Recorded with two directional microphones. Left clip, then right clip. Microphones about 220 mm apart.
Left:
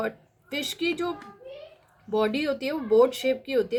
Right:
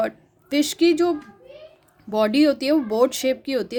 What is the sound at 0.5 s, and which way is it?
Speech, 50° right (ahead or behind).